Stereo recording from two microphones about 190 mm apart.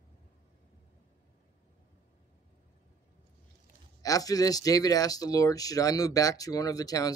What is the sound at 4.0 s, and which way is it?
Speech, 20° left (ahead or behind).